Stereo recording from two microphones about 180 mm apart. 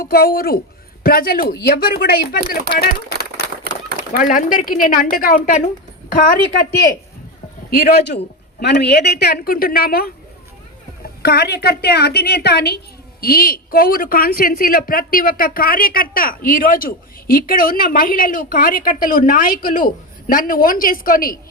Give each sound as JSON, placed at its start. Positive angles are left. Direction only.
{"t": 0.0, "sound": "speech", "side_deg": 60}
{"t": 4.1, "sound": "a woman's voice", "side_deg": 50}
{"t": 7.9, "sound": "a woman's voice", "side_deg": 65}